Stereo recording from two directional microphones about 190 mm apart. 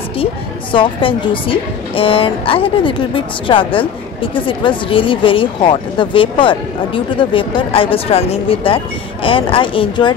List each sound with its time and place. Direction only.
0.2 s a woman's voice: 25° left (ahead or behind)